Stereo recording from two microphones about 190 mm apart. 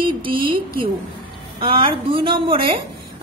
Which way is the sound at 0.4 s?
50° right (ahead or behind).